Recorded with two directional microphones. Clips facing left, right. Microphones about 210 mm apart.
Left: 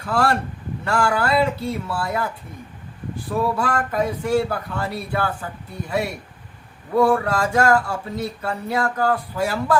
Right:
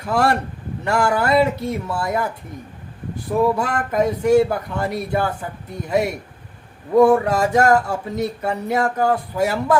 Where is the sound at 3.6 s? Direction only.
20° right (ahead or behind).